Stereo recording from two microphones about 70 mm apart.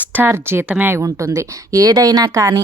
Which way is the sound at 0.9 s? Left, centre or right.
Right.